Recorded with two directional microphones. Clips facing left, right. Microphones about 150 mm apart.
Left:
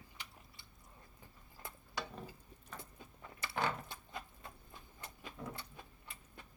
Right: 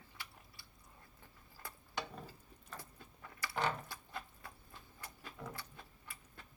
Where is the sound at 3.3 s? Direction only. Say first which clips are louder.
Even; 25° left (ahead or behind).